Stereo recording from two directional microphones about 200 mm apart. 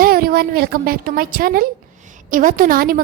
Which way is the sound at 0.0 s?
50° right (ahead or behind).